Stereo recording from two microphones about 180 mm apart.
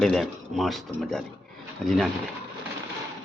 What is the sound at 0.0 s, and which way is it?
Speech, centre (ahead or behind).